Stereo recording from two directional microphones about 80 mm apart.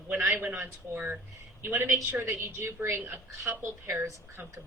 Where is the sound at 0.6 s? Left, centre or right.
Right.